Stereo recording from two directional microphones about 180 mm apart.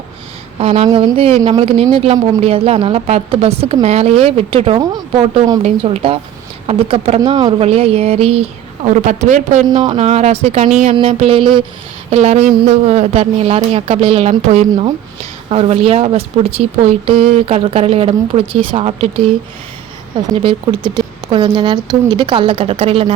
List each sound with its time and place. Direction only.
0.6 s a woman's voice: 35° right (ahead or behind)
10.9 s a woman's voice: 30° right (ahead or behind)
20.3 s speech: 30° right (ahead or behind)